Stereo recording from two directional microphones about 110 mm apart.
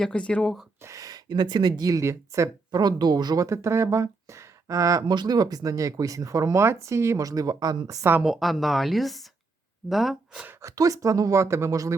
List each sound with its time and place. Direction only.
0.0 s speech: 10° left (ahead or behind)
0.8 s speech: 30° right (ahead or behind)
8.2 s a woman's voice: centre (ahead or behind)
10.3 s speech: 15° right (ahead or behind)
10.6 s speech: 30° right (ahead or behind)